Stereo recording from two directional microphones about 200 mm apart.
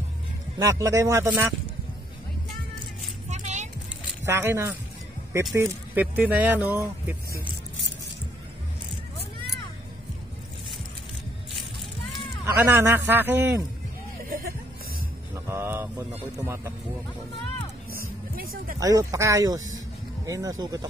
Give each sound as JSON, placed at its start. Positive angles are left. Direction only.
{"t": 0.6, "sound": "speech", "side_deg": -15}
{"t": 3.3, "sound": "music", "side_deg": -35}
{"t": 4.3, "sound": "speech", "side_deg": -10}
{"t": 12.4, "sound": "speech", "side_deg": -10}
{"t": 15.3, "sound": "music", "side_deg": -15}
{"t": 16.3, "sound": "speech", "side_deg": -15}
{"t": 18.3, "sound": "music", "side_deg": -45}
{"t": 18.8, "sound": "speech", "side_deg": -15}